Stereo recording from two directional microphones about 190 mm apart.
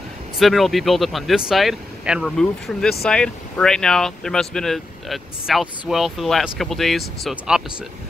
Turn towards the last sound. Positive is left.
turn(degrees=0)  # may be behind; listen again after turning